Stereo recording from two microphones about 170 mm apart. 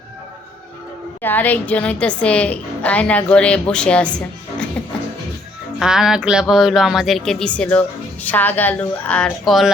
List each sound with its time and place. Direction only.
1.2 s a woman's voice: 10° left (ahead or behind)
5.8 s speech: 5° right (ahead or behind)